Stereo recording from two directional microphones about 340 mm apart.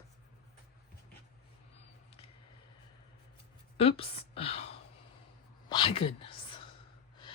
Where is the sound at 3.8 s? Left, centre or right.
Centre.